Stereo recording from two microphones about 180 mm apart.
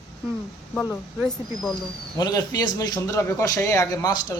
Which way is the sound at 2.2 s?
20° left (ahead or behind).